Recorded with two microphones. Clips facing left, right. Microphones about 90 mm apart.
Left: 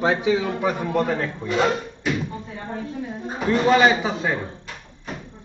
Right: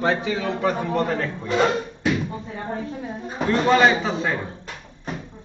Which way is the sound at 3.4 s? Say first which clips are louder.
Even; 5° left (ahead or behind).